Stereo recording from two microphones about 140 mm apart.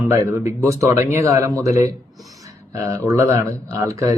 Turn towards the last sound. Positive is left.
turn(degrees=-25)  # may be behind; listen again after turning